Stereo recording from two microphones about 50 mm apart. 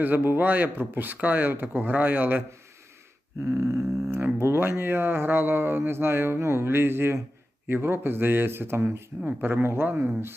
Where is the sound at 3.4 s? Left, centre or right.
Right.